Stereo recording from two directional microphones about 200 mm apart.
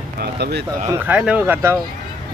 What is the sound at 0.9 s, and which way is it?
Speech, 5° right (ahead or behind).